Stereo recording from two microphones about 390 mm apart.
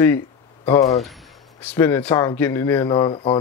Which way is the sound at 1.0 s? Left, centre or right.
Centre.